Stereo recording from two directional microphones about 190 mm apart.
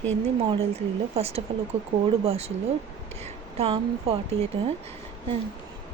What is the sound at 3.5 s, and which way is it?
Speech, 30° right (ahead or behind).